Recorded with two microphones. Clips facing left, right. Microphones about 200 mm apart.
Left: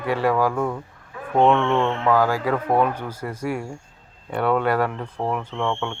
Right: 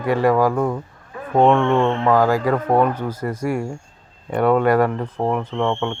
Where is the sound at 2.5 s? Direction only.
10° left (ahead or behind).